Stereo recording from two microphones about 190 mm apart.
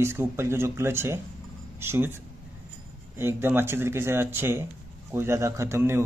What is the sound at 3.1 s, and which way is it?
Speech, 10° right (ahead or behind).